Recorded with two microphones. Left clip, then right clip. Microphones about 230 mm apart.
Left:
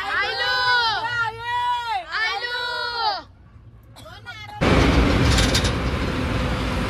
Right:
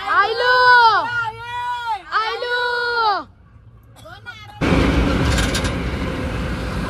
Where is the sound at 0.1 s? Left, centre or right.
Centre.